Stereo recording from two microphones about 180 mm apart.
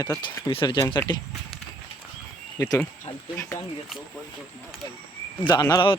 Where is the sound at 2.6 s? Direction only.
15° left (ahead or behind).